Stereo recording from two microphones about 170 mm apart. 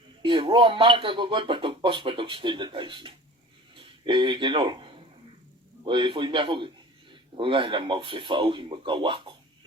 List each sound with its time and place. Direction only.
0.2 s speech: 30° right (ahead or behind)